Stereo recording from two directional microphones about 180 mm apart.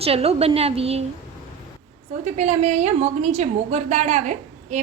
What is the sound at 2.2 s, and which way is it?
A woman's voice, 40° right (ahead or behind).